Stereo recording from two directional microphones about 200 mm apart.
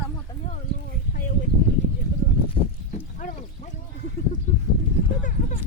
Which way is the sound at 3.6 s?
35° left (ahead or behind).